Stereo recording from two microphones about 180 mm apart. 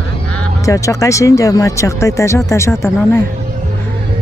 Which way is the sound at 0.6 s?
15° left (ahead or behind).